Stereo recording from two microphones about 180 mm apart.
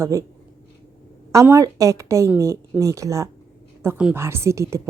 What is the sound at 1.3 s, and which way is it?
A woman's voice, 15° right (ahead or behind).